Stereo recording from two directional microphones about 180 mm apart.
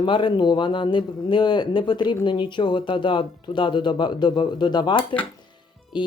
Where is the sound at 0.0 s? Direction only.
25° left (ahead or behind).